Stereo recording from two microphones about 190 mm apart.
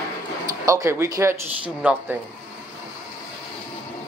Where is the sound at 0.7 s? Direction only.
15° right (ahead or behind).